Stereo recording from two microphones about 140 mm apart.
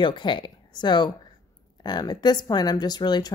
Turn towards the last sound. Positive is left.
turn(degrees=30)  # may be behind; listen again after turning